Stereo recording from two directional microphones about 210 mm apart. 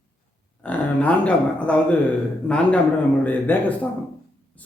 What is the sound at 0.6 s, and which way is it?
A man's voice, 5° left (ahead or behind).